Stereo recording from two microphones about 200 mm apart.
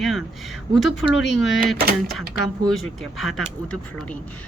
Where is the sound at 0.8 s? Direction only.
65° left (ahead or behind).